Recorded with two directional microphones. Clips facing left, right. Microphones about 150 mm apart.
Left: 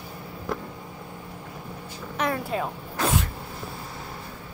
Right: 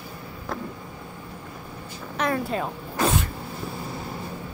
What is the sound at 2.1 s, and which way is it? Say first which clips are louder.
Speech: right 1 dB; 5° left (ahead or behind).